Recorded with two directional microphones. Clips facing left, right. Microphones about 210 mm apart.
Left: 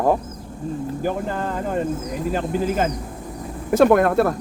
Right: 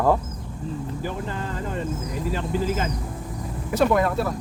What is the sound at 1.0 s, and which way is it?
Speech, 50° left (ahead or behind).